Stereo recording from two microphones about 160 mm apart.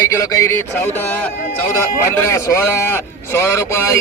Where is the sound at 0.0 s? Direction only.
20° left (ahead or behind).